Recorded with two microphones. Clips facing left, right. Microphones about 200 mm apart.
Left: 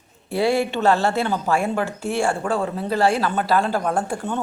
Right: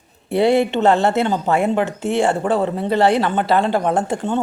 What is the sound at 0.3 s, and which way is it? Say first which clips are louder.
Speech: right 5 dB; 20° right (ahead or behind).